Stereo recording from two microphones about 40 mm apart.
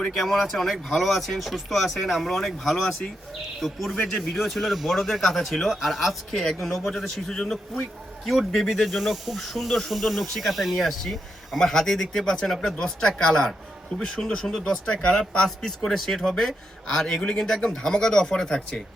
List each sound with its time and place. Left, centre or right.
0.2 s speech: centre
8.2 s speech: centre
12.5 s speech: centre
12.8 s speech: centre